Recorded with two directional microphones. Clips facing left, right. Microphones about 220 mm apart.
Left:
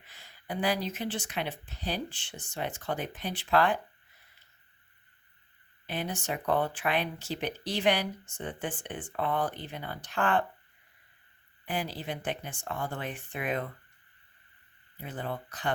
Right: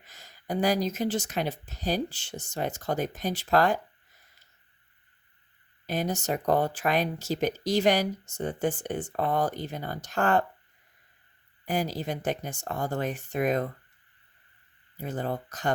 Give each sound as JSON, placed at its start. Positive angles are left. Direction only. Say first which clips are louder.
{"t": 0.0, "sound": "speech", "louder": "right 5 dB", "side_deg": -45}
{"t": 5.8, "sound": "speech", "louder": "right 5 dB", "side_deg": -40}
{"t": 11.6, "sound": "speech", "louder": "right 5 dB", "side_deg": -45}
{"t": 14.9, "sound": "speech", "louder": "right 5 dB", "side_deg": -45}